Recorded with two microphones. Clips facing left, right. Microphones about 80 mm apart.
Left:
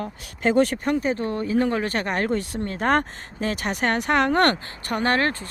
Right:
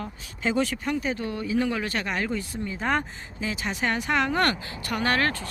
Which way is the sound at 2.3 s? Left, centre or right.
Left.